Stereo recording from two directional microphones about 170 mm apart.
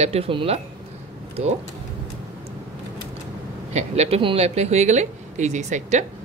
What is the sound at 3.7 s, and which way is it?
Speech, 40° right (ahead or behind).